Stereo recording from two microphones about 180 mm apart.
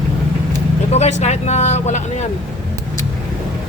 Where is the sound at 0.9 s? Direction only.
40° left (ahead or behind).